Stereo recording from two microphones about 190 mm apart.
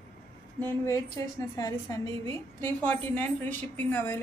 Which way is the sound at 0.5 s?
15° left (ahead or behind).